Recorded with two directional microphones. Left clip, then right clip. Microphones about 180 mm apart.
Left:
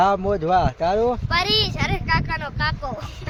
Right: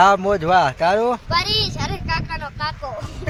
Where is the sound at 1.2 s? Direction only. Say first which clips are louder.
Even; 30° left (ahead or behind).